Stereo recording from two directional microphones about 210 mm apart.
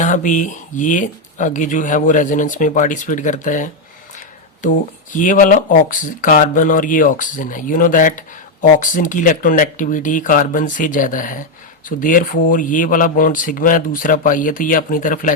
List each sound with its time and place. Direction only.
0.0 s speech: 35° left (ahead or behind)